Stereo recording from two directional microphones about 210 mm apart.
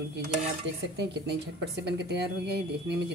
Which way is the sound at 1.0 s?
55° right (ahead or behind).